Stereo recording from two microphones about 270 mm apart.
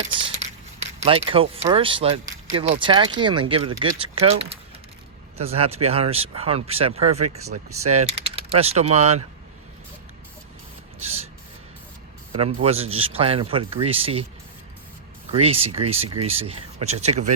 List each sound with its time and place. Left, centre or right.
0.9 s speech: right
7.8 s typing: right
8.2 s speech: right
11.0 s a sound: right
12.3 s a man's voice: right
15.3 s speech: right